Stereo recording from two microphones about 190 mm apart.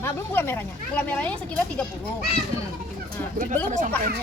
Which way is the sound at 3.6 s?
40° right (ahead or behind).